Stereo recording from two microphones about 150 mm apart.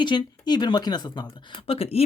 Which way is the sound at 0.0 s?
30° left (ahead or behind).